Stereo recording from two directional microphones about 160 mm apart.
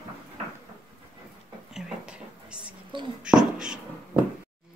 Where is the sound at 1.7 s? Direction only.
5° right (ahead or behind).